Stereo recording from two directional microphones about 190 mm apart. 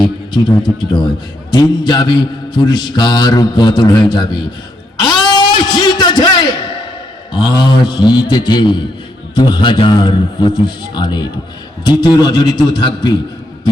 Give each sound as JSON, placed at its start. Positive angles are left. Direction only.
{"t": 0.0, "sound": "a man's voice", "side_deg": 20}
{"t": 4.9, "sound": "a sound", "side_deg": 20}
{"t": 7.3, "sound": "a man's voice", "side_deg": 25}